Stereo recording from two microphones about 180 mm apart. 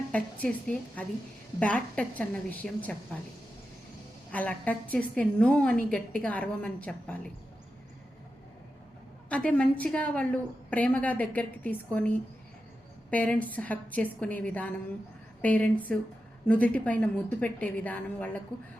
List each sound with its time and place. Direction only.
0.1 s a woman's voice: 5° left (ahead or behind)
4.3 s a woman's voice: 10° left (ahead or behind)
9.3 s a woman's voice: 5° left (ahead or behind)